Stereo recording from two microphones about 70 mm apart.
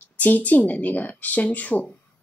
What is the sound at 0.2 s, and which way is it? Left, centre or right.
A woman's voice, left.